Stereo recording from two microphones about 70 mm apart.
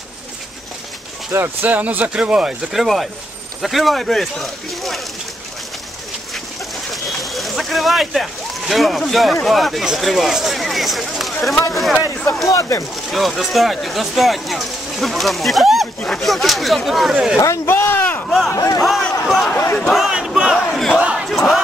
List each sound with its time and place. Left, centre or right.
1.3 s speech: right; by 5.0 s centre
6.3 s speech: centre
12.4 s speech: left
12.9 s speech: centre
17.4 s speech: left
18.2 s a sound: centre
19.2 s speech: centre
19.5 s speech: left
19.8 s speech: centre
20.1 s battle cry: centre
21.0 s battle cry: centre
21.3 s battle cry: centre